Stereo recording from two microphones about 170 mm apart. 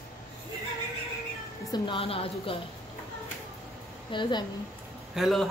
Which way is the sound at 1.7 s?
30° left (ahead or behind).